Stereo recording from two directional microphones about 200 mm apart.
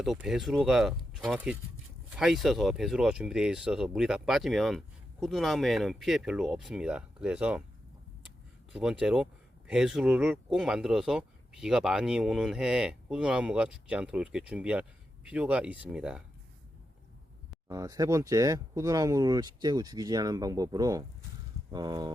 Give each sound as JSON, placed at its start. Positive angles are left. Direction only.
{"t": 0.0, "sound": "speech", "side_deg": 0}
{"t": 8.7, "sound": "speech", "side_deg": -5}
{"t": 17.7, "sound": "speech", "side_deg": -15}